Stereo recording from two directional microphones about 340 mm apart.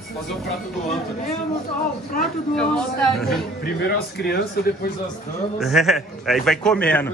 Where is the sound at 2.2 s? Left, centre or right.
Centre.